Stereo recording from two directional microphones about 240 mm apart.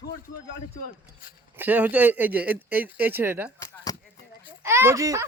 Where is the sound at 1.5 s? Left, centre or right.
Centre.